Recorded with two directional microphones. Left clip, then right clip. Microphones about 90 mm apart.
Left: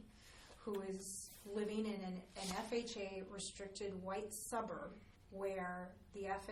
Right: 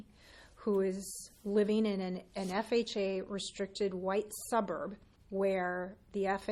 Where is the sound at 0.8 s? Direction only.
40° right (ahead or behind).